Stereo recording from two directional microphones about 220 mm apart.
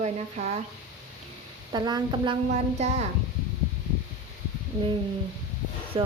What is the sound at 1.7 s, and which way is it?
Speech, 20° right (ahead or behind).